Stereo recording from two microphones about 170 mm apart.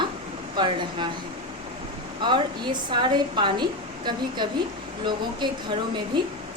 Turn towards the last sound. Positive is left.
turn(degrees=-25)  # may be behind; listen again after turning